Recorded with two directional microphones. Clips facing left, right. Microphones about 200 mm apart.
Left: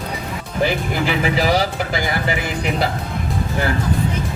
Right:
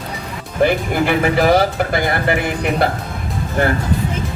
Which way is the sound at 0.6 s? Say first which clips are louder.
Right 4 dB; 55° right (ahead or behind).